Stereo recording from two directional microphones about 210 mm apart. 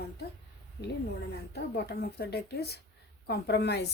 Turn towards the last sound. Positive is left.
turn(degrees=50)  # may be behind; listen again after turning